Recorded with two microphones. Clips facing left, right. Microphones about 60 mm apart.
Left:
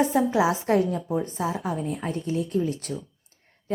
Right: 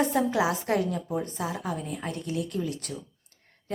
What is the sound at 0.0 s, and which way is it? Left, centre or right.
Speech, centre.